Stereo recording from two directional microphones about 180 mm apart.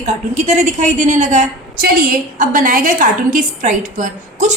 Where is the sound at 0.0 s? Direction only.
40° right (ahead or behind).